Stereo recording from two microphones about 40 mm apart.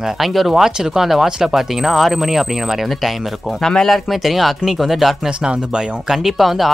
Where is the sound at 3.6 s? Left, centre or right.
Centre.